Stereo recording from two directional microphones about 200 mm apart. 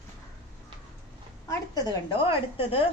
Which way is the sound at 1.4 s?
20° left (ahead or behind).